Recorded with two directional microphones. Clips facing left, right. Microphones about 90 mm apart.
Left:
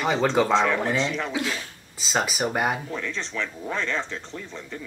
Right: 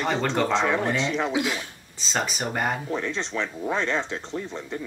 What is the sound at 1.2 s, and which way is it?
Speech, 20° right (ahead or behind).